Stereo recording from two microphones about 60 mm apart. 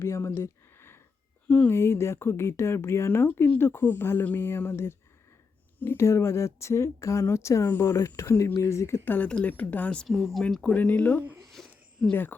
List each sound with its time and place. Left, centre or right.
0.0 s speech: left
0.8 s a sound: left
1.5 s speech: left
1.7 s speech: left
6.0 s speech: left
9.0 s speech: left
10.1 s speech: centre
10.6 s speech: left
11.6 s a sound: centre
12.1 s speech: left